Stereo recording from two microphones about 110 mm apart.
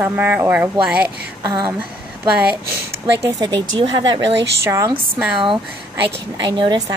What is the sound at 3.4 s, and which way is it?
Speech, 45° right (ahead or behind).